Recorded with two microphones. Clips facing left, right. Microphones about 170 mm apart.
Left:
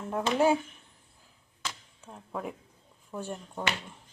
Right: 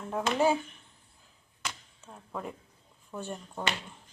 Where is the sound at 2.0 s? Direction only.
5° left (ahead or behind).